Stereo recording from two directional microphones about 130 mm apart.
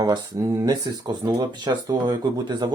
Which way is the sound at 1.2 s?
35° right (ahead or behind).